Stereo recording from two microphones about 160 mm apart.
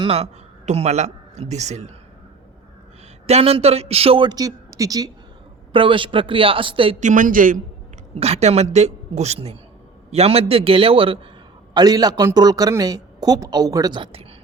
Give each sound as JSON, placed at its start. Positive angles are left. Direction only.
{"t": 0.0, "sound": "a man's voice", "side_deg": -40}
{"t": 3.2, "sound": "a man's voice", "side_deg": -40}
{"t": 7.0, "sound": "a woman's voice", "side_deg": -55}
{"t": 8.2, "sound": "a man's voice", "side_deg": -40}
{"t": 11.7, "sound": "a man's voice", "side_deg": -25}